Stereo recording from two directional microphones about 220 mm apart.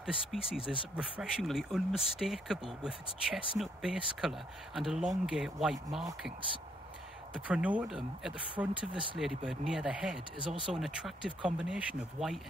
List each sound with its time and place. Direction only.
0.5 s speech: centre (ahead or behind)
7.4 s speech: 5° right (ahead or behind)
10.4 s speech: 25° left (ahead or behind)
10.7 s speech: centre (ahead or behind)